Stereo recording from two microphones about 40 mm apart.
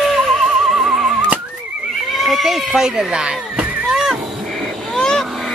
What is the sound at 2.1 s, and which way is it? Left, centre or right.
Neigh, centre.